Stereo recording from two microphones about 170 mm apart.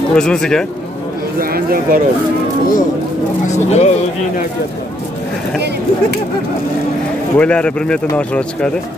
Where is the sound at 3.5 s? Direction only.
40° left (ahead or behind).